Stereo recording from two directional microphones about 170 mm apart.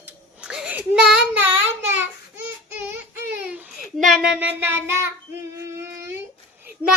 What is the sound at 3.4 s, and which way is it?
Child singing, 10° right (ahead or behind).